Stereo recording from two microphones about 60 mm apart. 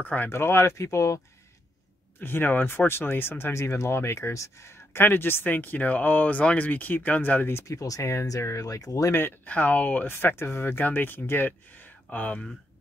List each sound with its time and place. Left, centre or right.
0.0 s speech: left
0.3 s speech: left
2.1 s speech: left
7.6 s speech: left
9.1 s speech: left
9.5 s speech: left